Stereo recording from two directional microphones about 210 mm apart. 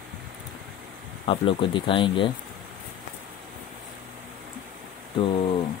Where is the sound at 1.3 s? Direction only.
25° left (ahead or behind).